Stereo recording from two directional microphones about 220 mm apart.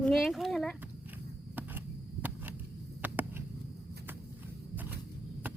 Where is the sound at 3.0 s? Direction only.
10° right (ahead or behind).